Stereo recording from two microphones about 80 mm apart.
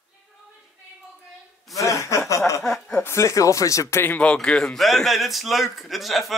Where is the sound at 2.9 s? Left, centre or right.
Left.